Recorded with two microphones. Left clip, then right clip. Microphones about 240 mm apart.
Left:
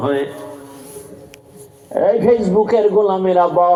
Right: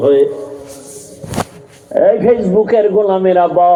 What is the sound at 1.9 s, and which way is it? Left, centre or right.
Speech, centre.